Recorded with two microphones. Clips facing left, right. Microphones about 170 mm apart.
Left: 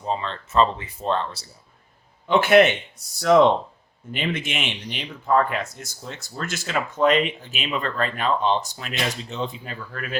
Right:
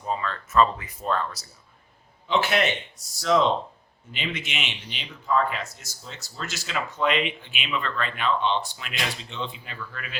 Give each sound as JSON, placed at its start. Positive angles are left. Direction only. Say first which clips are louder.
{"t": 0.0, "sound": "speech", "louder": "left 2 dB", "side_deg": 25}
{"t": 2.2, "sound": "speech", "louder": "left 8 dB", "side_deg": 55}